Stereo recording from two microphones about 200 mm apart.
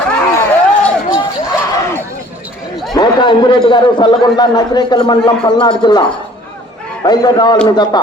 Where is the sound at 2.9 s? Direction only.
20° left (ahead or behind).